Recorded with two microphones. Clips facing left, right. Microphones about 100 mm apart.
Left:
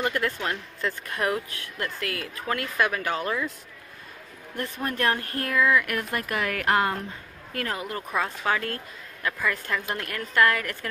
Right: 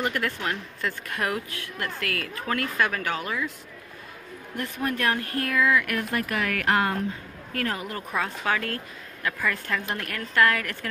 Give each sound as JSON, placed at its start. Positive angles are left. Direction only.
{"t": 0.0, "sound": "speech", "side_deg": 25}
{"t": 4.8, "sound": "speech", "side_deg": 30}
{"t": 9.4, "sound": "a woman's voice", "side_deg": 15}